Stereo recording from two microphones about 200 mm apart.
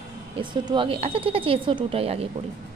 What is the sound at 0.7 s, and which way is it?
Speech, 25° right (ahead or behind).